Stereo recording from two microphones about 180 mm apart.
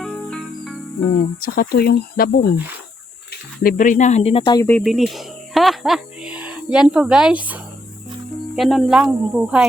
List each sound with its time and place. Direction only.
0.0 s music: centre (ahead or behind)
1.4 s speech: 55° left (ahead or behind)
3.6 s speech: 50° left (ahead or behind); by 4.6 s 30° left (ahead or behind)
4.8 s speech: centre (ahead or behind)